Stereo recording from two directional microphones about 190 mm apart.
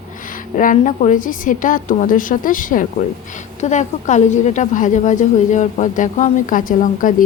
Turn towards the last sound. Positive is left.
turn(degrees=45)  # may be behind; listen again after turning